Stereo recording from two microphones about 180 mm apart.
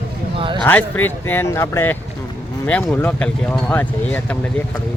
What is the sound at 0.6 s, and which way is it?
Speech, 10° left (ahead or behind).